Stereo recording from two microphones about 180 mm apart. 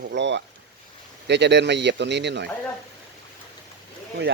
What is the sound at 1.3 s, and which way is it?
Speech, 70° right (ahead or behind).